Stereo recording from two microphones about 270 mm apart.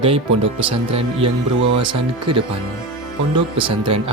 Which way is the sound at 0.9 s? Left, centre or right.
Centre.